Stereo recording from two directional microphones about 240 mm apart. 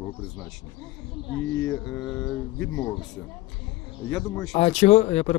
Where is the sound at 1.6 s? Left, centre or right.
Centre.